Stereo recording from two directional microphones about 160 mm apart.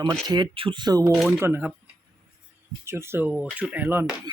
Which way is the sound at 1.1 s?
5° right (ahead or behind).